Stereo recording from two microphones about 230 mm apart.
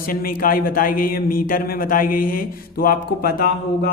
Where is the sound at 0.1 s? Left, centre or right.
Left.